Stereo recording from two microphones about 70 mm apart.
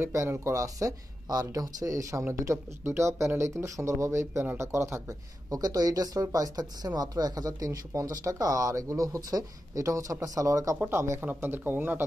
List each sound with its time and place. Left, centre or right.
0.1 s speech: right
10.8 s speech: right
11.2 s speech: right